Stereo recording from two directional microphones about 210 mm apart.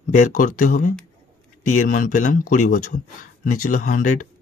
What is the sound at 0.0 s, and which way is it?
Speech, 40° left (ahead or behind).